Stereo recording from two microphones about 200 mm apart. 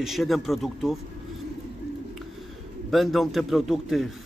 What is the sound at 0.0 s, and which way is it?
Speech, centre (ahead or behind).